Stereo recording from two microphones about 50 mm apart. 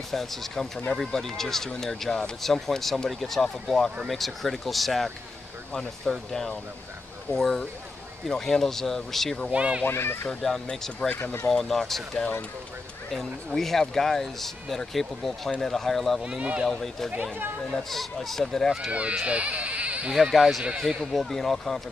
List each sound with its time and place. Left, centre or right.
0.1 s speech: centre
5.7 s speech: centre
9.5 s speech: right
9.8 s a child's voice: left
10.4 s speech: centre
13.6 s speech: centre
16.3 s speech: right
16.6 s speech: centre
18.9 s speech: right
20.1 s speech: centre